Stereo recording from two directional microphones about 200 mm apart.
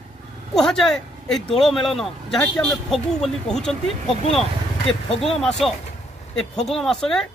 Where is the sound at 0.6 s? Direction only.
5° left (ahead or behind).